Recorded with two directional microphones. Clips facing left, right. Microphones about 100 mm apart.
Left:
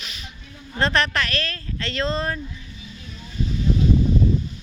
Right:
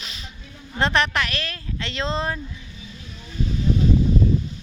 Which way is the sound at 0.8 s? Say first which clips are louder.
Even; 20° right (ahead or behind).